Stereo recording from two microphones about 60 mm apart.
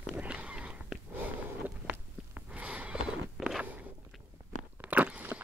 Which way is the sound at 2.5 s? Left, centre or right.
Right.